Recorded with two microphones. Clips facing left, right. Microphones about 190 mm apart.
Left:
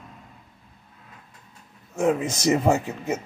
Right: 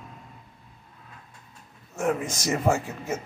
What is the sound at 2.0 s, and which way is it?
A man's voice, 20° left (ahead or behind).